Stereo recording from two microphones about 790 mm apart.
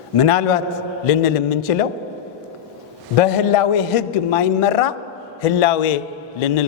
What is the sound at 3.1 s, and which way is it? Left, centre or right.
A man's voice, left.